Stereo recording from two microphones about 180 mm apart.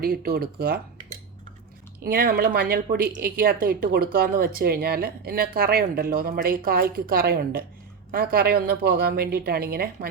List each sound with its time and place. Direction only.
0.0 s speech: 55° right (ahead or behind)
2.0 s speech: 55° right (ahead or behind)